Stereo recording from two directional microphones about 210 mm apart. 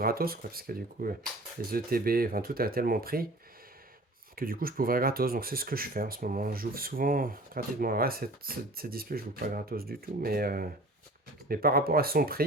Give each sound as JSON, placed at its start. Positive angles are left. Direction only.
{"t": 0.0, "sound": "speech", "side_deg": -45}
{"t": 4.4, "sound": "speech", "side_deg": -45}